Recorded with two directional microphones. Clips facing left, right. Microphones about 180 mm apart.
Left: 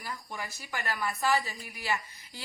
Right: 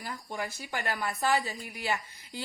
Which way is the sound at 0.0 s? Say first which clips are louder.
Right 3 dB; 30° right (ahead or behind).